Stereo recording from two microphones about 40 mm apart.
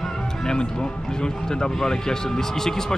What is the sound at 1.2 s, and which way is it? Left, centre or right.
Speech, centre.